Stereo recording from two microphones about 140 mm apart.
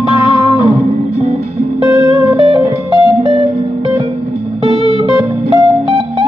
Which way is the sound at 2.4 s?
35° right (ahead or behind).